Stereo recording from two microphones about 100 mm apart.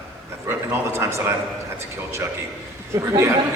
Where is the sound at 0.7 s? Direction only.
25° right (ahead or behind).